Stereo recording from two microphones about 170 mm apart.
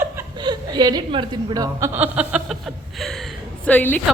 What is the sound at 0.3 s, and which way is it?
Chuckle, 25° right (ahead or behind).